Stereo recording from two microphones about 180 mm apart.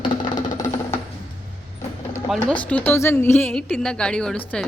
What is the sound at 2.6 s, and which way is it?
Speech, 10° left (ahead or behind).